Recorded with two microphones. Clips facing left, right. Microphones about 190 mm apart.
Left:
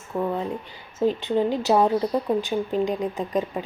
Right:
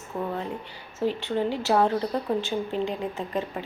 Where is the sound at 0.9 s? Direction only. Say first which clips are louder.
Left 4 dB; 15° left (ahead or behind).